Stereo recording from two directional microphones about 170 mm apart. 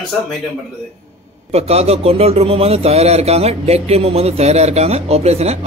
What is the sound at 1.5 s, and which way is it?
A man's voice, 40° right (ahead or behind).